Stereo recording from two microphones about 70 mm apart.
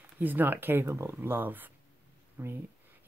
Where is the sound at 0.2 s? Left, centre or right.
Right.